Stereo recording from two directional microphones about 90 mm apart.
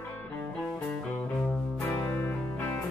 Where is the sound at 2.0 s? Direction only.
20° left (ahead or behind).